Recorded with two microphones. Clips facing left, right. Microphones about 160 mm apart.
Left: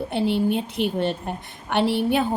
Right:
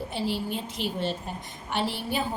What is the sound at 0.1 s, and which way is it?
Speech, 60° left (ahead or behind).